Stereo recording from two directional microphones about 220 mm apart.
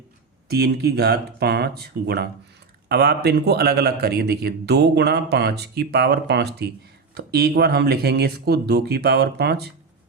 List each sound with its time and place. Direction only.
0.4 s a man's voice: 45° right (ahead or behind)